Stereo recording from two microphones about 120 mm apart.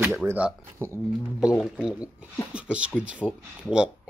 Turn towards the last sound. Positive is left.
turn(degrees=-10)  # may be behind; listen again after turning